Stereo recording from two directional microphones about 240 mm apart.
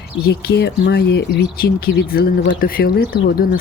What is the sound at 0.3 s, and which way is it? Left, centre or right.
Speech, left.